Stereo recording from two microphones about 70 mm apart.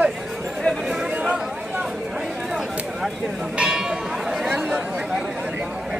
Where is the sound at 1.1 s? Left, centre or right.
Centre.